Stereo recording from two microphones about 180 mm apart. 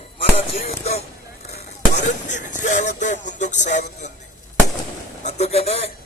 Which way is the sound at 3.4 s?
40° left (ahead or behind).